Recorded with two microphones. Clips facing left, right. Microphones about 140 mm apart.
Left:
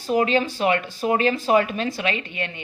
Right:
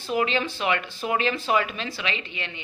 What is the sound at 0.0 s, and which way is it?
Speech, 45° left (ahead or behind).